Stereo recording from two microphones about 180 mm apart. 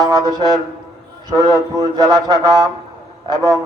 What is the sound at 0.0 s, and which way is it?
A man's voice, 20° right (ahead or behind).